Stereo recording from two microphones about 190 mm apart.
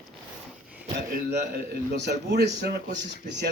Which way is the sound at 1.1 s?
55° right (ahead or behind).